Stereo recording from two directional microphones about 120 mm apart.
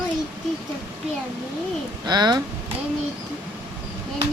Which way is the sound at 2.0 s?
35° right (ahead or behind).